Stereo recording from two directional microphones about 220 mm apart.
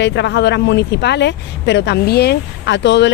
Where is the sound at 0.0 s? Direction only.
55° left (ahead or behind).